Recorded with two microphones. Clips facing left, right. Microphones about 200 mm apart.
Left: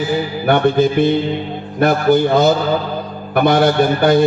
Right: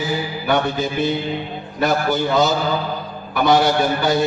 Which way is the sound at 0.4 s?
55° left (ahead or behind).